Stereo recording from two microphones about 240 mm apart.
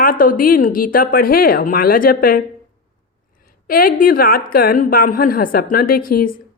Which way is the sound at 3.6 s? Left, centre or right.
Left.